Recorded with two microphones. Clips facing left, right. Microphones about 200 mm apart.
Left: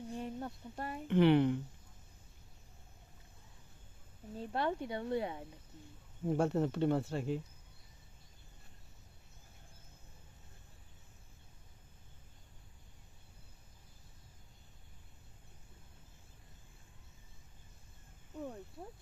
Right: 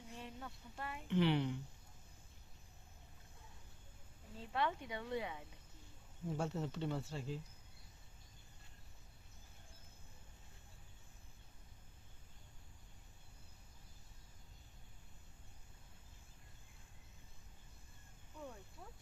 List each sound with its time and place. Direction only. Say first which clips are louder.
0.1 s speech: left 9 dB; 40° left (ahead or behind)
1.0 s speech: left 8 dB; 55° left (ahead or behind)
4.4 s speech: left 4 dB; 40° left (ahead or behind)
6.2 s speech: left 9 dB; 60° left (ahead or behind)